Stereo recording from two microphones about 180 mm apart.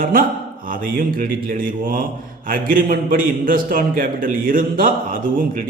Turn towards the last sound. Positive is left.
turn(degrees=-50)  # may be behind; listen again after turning